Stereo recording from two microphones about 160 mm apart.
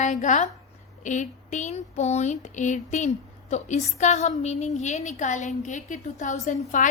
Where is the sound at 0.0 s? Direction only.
50° left (ahead or behind).